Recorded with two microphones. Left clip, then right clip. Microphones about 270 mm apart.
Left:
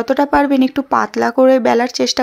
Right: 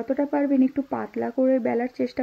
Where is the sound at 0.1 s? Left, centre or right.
Centre.